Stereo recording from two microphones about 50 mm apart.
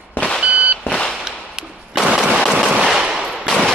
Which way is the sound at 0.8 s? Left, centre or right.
Centre.